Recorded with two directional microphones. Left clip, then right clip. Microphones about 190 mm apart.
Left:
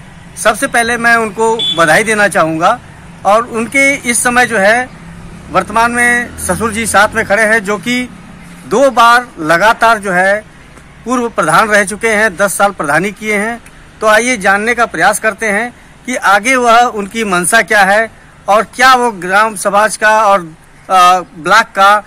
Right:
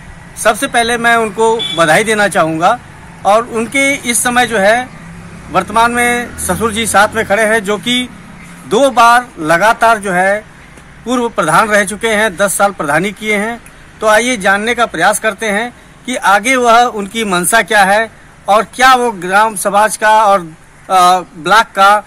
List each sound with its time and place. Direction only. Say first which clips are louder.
0.4 s speech: left 1 dB; 5° left (ahead or behind)
2.6 s vehicle: even; centre (ahead or behind)
3.5 s speech: left 2 dB; 15° left (ahead or behind)
5.6 s speech: even; 5° left (ahead or behind)
8.8 s speech: left 1 dB; centre (ahead or behind)
15.3 s speech: left 2 dB; 15° left (ahead or behind)